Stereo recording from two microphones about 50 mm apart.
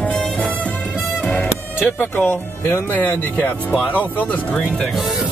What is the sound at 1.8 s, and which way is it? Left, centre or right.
Speech, left.